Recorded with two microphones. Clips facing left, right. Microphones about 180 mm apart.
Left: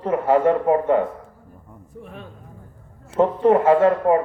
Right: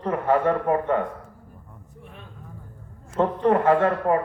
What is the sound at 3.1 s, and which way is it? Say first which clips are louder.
A man's voice: left 4 dB; 25° left (ahead or behind).